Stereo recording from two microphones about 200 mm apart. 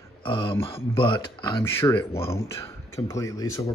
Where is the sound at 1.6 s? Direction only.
10° left (ahead or behind).